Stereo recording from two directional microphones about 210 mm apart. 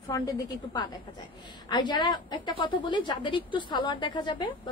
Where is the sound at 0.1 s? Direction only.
20° left (ahead or behind).